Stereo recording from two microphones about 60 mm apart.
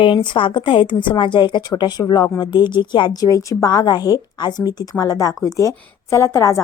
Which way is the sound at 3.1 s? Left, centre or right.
Left.